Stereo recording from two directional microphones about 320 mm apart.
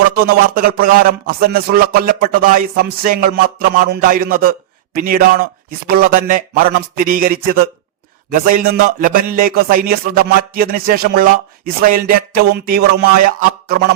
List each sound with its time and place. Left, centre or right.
0.3 s a man's voice: right